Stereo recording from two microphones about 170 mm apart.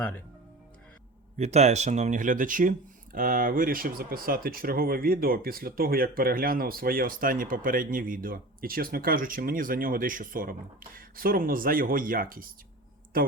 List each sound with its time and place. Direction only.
1.4 s speech: 40° right (ahead or behind); by 12.5 s 55° right (ahead or behind)